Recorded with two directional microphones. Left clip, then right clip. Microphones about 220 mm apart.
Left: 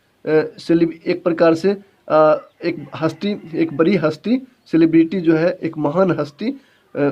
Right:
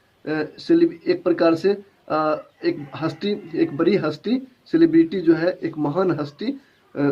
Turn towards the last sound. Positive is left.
turn(degrees=50)  # may be behind; listen again after turning